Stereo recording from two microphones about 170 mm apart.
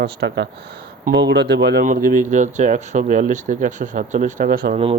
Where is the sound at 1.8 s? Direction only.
55° right (ahead or behind).